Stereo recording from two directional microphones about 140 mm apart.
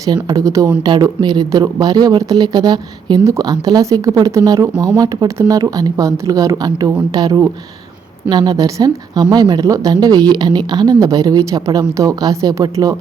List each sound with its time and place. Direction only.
0.0 s speech: 25° right (ahead or behind)